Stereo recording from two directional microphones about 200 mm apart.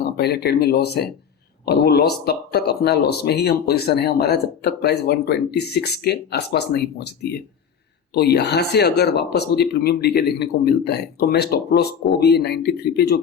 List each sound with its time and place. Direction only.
0.0 s speech: 55° left (ahead or behind)